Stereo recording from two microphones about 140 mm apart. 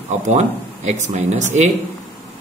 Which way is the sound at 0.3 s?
55° right (ahead or behind).